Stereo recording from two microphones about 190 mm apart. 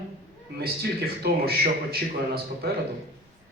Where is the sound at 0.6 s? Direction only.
55° right (ahead or behind).